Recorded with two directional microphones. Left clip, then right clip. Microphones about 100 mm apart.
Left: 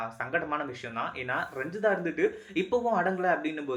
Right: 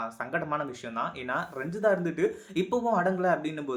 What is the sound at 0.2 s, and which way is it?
Speech, 35° right (ahead or behind).